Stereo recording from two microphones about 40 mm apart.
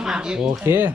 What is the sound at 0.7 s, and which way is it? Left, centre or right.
Speech, right.